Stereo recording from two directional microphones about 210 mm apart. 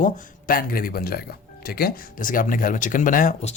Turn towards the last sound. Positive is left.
turn(degrees=40)  # may be behind; listen again after turning